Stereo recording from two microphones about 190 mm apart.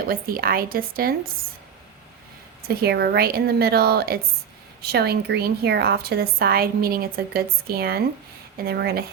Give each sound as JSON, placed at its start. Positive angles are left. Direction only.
{"t": 0.1, "sound": "speech", "side_deg": -50}
{"t": 2.6, "sound": "a woman's voice", "side_deg": -55}